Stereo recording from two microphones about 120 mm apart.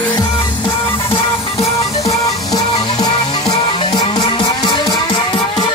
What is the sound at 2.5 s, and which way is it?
Music, 30° left (ahead or behind).